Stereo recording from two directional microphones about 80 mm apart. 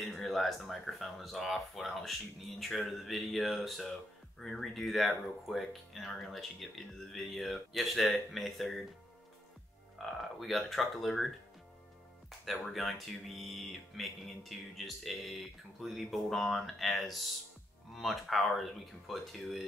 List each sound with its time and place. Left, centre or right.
0.0 s speech: centre
10.0 s speech: centre
12.3 s speech: centre